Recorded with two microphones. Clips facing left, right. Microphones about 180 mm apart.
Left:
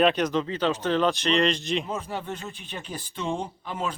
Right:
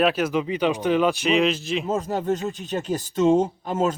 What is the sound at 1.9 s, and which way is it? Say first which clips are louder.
Speech: right 8 dB; 40° right (ahead or behind).